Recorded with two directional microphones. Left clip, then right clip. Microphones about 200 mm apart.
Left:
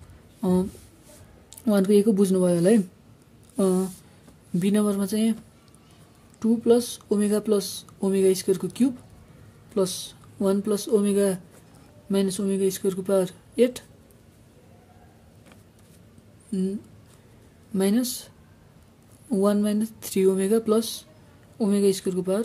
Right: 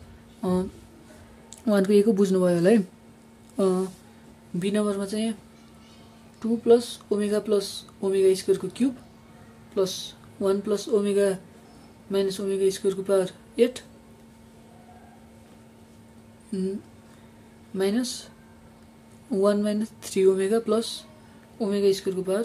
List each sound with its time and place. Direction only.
0.4 s a woman's voice: 30° left (ahead or behind)
4.6 s speech: 40° left (ahead or behind)
6.4 s speech: 40° left (ahead or behind)
16.5 s speech: 30° left (ahead or behind)
17.7 s speech: 35° left (ahead or behind)
19.3 s speech: 35° left (ahead or behind)